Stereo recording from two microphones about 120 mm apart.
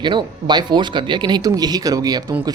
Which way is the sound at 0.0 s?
40° right (ahead or behind).